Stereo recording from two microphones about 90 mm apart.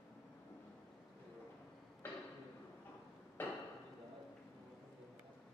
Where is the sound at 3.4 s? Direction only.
20° left (ahead or behind).